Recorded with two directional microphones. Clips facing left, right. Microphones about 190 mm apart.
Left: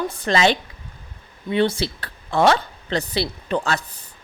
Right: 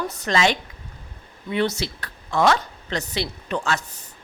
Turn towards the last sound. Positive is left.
turn(degrees=35)  # may be behind; listen again after turning